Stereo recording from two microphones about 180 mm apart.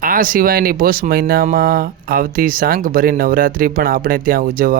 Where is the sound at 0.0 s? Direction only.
50° right (ahead or behind).